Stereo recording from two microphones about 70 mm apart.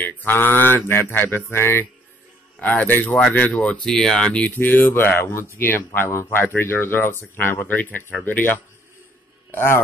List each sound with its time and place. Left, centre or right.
0.0 s mantra: left
2.6 s speech: left
3.8 s speech: centre
4.5 s mantra: left
6.4 s a man's voice: left